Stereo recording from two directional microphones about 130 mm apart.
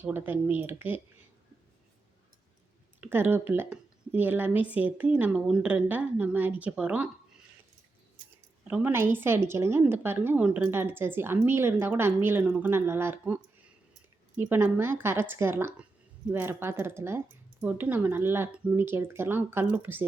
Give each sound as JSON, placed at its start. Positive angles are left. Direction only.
{"t": 0.0, "sound": "speech", "side_deg": -15}
{"t": 3.0, "sound": "speech", "side_deg": -15}
{"t": 8.6, "sound": "a woman's voice", "side_deg": -15}